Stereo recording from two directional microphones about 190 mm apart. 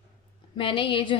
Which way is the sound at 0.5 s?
25° left (ahead or behind).